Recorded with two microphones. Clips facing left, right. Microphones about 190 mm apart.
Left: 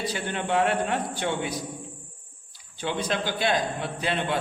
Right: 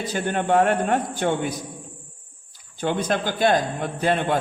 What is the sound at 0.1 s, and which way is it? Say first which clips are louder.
A man's voice: right 6 dB; 50° right (ahead or behind).